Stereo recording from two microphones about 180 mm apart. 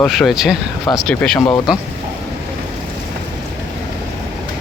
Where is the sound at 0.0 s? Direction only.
Centre (ahead or behind).